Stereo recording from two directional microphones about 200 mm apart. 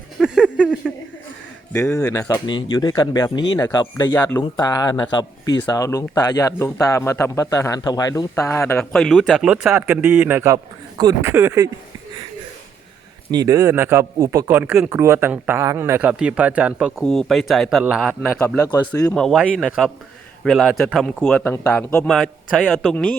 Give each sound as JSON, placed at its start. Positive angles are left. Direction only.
{"t": 0.2, "sound": "a sound", "side_deg": -5}
{"t": 1.7, "sound": "a man's voice", "side_deg": 15}
{"t": 13.3, "sound": "a man's voice", "side_deg": -15}
{"t": 18.2, "sound": "speech", "side_deg": 10}
{"t": 19.1, "sound": "a man's voice", "side_deg": 0}